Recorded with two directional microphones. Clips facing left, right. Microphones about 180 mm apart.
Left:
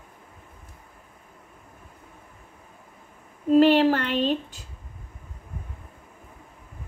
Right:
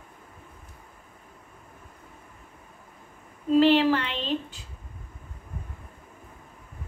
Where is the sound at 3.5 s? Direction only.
45° left (ahead or behind).